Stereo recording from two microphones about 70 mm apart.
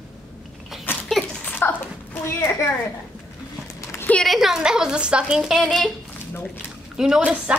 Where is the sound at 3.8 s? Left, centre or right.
Left.